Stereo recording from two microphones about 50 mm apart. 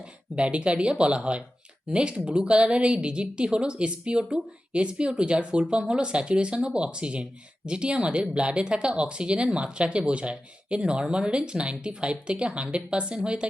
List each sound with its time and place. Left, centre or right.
0.3 s speech: right